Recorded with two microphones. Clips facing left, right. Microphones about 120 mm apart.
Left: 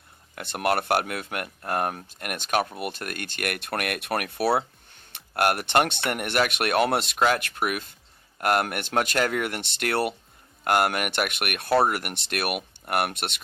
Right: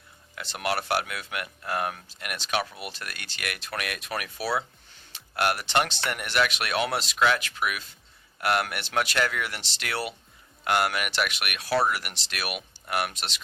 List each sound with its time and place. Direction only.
0.3 s speech: 50° left (ahead or behind)